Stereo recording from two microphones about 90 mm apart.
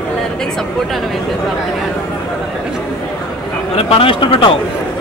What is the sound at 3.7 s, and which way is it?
Speech, 80° left.